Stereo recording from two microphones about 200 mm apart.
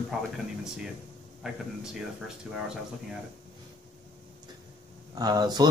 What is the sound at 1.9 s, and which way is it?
Speech, 5° right (ahead or behind).